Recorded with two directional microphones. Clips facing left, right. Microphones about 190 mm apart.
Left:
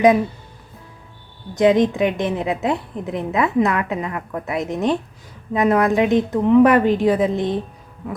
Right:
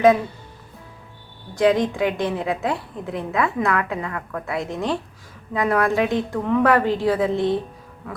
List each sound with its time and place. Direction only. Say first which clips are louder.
1.5 s a woman's voice: left 3 dB; 20° left (ahead or behind)